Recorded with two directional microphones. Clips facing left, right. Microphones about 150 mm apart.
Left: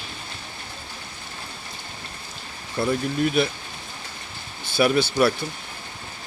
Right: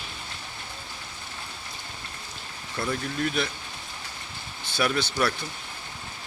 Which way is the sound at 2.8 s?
25° left (ahead or behind).